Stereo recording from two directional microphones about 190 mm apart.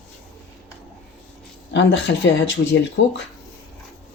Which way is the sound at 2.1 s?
65° left (ahead or behind).